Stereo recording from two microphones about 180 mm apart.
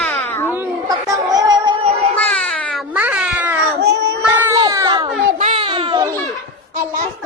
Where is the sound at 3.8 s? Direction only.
70° right (ahead or behind).